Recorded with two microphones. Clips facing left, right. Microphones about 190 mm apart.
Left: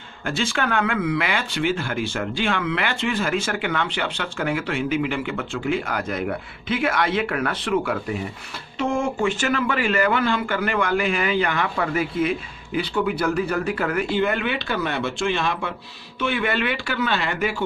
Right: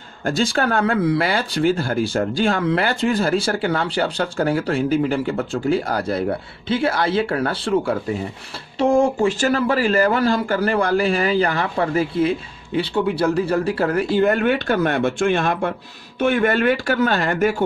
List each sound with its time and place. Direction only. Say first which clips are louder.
0.2 s speech: right 5 dB; 40° right (ahead or behind)